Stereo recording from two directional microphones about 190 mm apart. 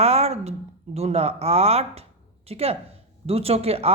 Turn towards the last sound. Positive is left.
turn(degrees=-30)  # may be behind; listen again after turning